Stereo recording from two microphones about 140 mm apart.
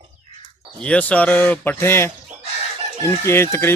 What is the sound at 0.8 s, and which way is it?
Speech, 10° left (ahead or behind).